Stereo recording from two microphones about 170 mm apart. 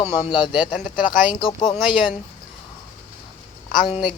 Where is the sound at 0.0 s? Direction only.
30° left (ahead or behind).